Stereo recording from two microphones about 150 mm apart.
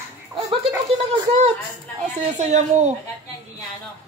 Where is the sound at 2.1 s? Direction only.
50° right (ahead or behind).